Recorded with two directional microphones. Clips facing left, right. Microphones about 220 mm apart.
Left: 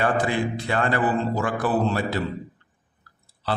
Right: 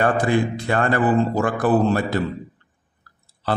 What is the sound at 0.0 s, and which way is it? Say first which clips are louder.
A man's voice: right 4 dB; 50° right (ahead or behind).